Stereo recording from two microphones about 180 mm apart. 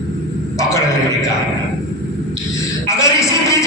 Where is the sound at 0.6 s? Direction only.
15° left (ahead or behind).